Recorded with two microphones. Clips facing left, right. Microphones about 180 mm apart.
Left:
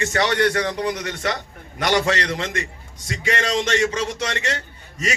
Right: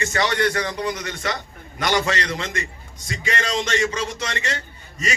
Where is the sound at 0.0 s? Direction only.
70° left (ahead or behind).